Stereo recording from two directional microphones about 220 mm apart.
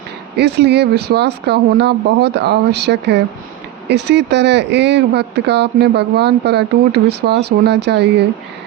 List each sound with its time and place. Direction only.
0.3 s speech: 50° right (ahead or behind)